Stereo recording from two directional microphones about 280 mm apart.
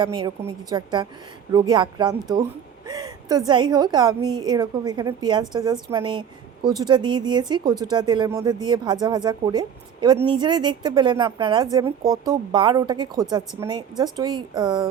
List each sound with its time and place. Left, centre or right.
0.0 s a woman's voice: centre